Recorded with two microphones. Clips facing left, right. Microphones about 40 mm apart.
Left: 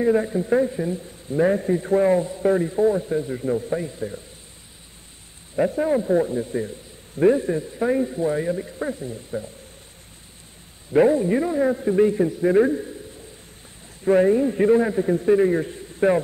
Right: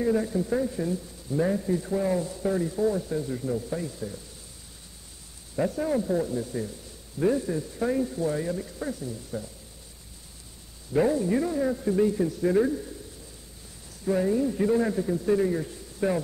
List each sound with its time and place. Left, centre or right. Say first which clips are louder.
0.0 s a man's voice: left 5 dB; left
5.6 s a man's voice: left 6 dB; left
10.9 s a man's voice: left 6 dB; left
14.0 s a man's voice: left 7 dB; left
14.8 s a man's voice: left 5 dB; left